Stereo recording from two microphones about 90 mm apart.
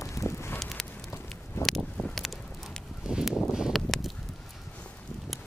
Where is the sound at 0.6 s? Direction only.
5° left (ahead or behind).